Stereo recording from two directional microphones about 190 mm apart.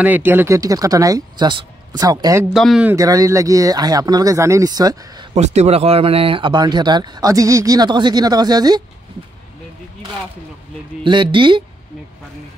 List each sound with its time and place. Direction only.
0.0 s speech: 10° right (ahead or behind)
2.5 s speech: centre (ahead or behind)
3.0 s speech: 15° right (ahead or behind)
5.3 s speech: 35° right (ahead or behind); by 8.8 s 20° right (ahead or behind)
11.1 s speech: 25° right (ahead or behind)